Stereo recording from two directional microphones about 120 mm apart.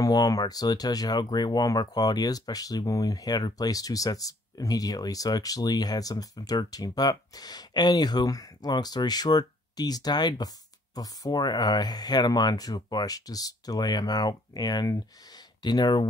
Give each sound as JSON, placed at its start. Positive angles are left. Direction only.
{"t": 0.0, "sound": "speech", "side_deg": 30}